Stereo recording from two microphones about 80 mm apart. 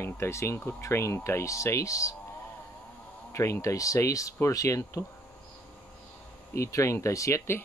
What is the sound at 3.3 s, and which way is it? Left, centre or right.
Speech, left.